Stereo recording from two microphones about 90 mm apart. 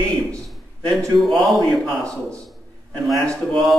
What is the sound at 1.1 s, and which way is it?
Speech, centre (ahead or behind).